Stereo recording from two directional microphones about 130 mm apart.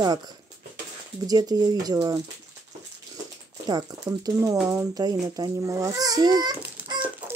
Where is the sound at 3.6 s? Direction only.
30° right (ahead or behind).